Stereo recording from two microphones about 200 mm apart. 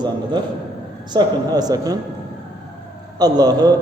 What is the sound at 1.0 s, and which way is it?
Speech, 20° right (ahead or behind).